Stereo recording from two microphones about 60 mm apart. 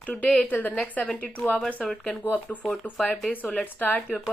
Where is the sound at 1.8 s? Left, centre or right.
Centre.